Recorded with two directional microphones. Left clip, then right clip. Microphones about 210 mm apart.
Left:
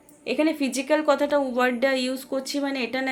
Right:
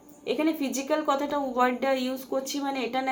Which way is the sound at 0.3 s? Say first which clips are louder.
Left 3 dB; 50° left (ahead or behind).